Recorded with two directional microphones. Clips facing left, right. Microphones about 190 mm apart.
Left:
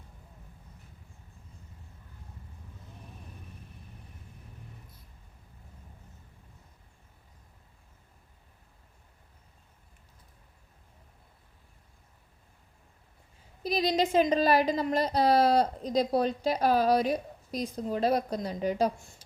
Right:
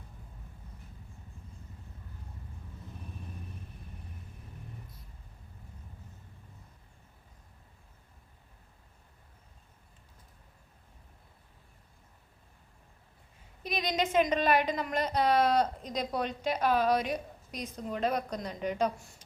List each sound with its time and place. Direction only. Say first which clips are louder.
13.6 s a woman's voice: left 5 dB; 35° left (ahead or behind)